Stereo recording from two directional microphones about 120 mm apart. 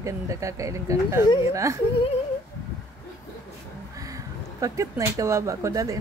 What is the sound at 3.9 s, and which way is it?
Speech, 30° right (ahead or behind).